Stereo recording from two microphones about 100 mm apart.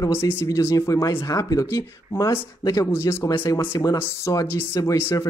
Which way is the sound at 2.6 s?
40° left (ahead or behind).